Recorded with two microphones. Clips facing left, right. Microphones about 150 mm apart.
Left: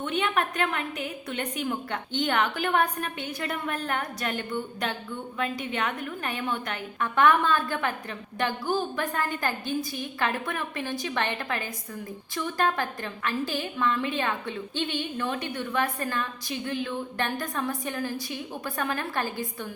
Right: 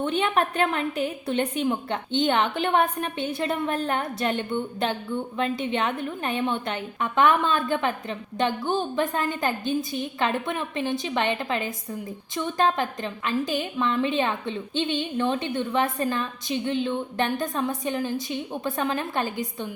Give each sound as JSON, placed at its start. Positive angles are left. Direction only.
{"t": 0.0, "sound": "a woman's voice", "side_deg": -30}